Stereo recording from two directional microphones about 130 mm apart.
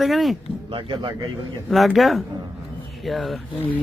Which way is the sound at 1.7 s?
Centre (ahead or behind).